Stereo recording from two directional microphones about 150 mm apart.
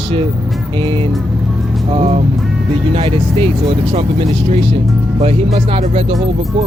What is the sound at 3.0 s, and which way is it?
Speech, 40° right (ahead or behind).